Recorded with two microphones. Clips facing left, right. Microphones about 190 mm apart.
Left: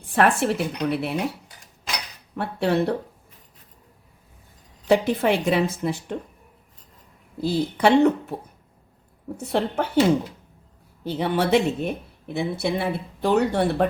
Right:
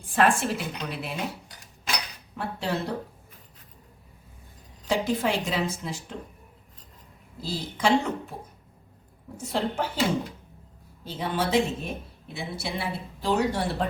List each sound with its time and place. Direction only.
0.1 s a woman's voice: 65° left (ahead or behind)
2.4 s a woman's voice: 65° left (ahead or behind)
4.9 s a woman's voice: 60° left (ahead or behind)
7.4 s a woman's voice: 60° left (ahead or behind)
9.4 s a woman's voice: 65° left (ahead or behind)
11.0 s a woman's voice: 65° left (ahead or behind)